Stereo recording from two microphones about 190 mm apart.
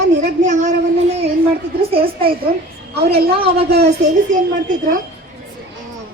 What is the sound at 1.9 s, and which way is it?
A woman's voice, 30° right (ahead or behind).